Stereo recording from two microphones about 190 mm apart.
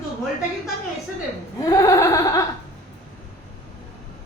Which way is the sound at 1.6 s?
20° left (ahead or behind).